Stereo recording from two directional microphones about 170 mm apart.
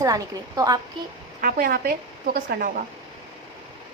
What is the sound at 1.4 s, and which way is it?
Speech, 60° right (ahead or behind).